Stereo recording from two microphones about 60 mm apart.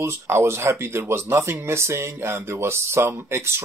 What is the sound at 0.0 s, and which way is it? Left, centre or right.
Speech, right.